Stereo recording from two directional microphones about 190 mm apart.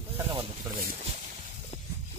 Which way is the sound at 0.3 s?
25° right (ahead or behind).